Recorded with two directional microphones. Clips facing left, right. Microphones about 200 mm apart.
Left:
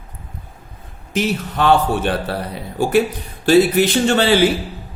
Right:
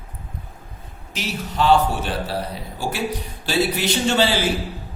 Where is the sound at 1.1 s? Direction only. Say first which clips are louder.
Left 6 dB; 55° left (ahead or behind).